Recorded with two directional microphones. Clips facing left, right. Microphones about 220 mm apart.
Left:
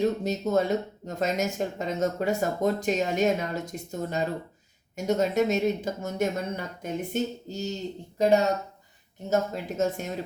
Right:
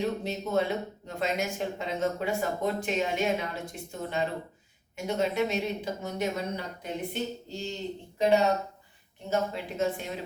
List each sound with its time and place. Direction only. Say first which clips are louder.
0.0 s speech: left 5 dB; 45° left (ahead or behind)
9.3 s speech: left 3 dB; 45° left (ahead or behind)